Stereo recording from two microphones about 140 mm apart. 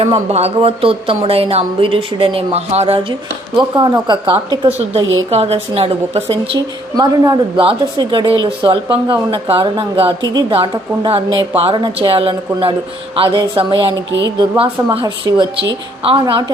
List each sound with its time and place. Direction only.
0.0 s a woman's voice: 45° right (ahead or behind)
5.3 s speech: 45° right (ahead or behind)
6.9 s a woman's voice: 30° right (ahead or behind)
15.0 s speech: 25° right (ahead or behind)
16.0 s a woman's voice: 35° right (ahead or behind)